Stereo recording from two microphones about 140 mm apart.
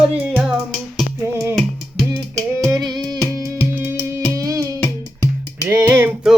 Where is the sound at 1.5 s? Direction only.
Centre (ahead or behind).